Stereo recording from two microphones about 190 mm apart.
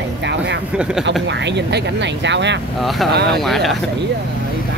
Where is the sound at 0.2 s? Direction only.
65° right (ahead or behind).